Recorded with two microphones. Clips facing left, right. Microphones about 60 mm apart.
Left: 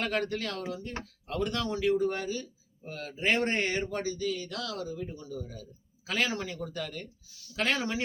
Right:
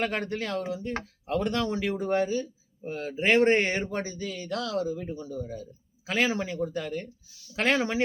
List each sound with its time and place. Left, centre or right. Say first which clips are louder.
0.0 s speech: right 1 dB; right